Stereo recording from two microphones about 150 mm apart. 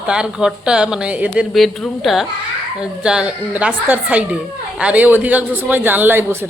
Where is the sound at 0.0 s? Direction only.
5° right (ahead or behind).